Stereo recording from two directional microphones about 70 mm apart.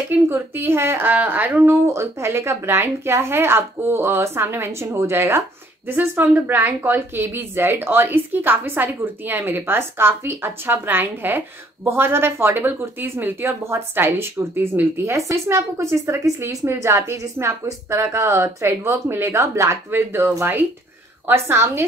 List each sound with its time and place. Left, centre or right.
0.3 s a woman's voice: right
1.0 s speech: right
1.7 s a woman's voice: right